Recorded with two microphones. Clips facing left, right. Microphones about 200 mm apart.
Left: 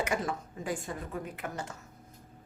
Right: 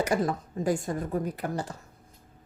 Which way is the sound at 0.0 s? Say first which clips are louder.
Right 5 dB; 35° right (ahead or behind).